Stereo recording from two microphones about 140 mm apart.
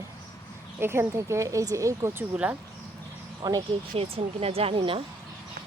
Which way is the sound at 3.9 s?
45° right (ahead or behind).